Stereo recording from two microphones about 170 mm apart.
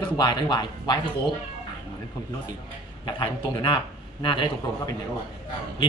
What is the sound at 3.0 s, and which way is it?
A man's voice, 30° left (ahead or behind).